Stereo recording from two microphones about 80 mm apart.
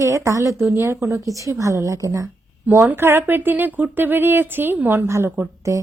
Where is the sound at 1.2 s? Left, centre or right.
Right.